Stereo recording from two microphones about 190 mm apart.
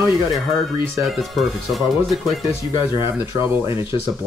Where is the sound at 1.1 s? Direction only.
Centre (ahead or behind).